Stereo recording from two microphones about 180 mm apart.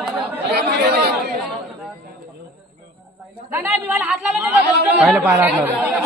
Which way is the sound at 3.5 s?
10° right (ahead or behind).